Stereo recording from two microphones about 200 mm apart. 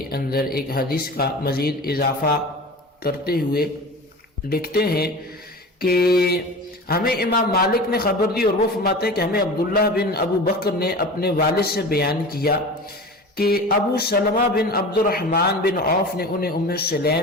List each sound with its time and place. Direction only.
0.1 s a man's voice: 50° left (ahead or behind)